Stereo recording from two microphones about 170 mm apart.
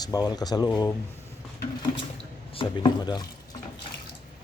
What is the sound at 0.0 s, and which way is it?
Speech, 20° left (ahead or behind).